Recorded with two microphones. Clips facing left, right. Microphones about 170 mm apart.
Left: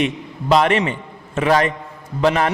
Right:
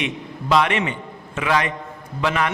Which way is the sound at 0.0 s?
40° left (ahead or behind).